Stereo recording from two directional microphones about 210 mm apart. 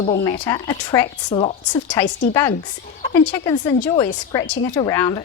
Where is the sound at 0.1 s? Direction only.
15° left (ahead or behind).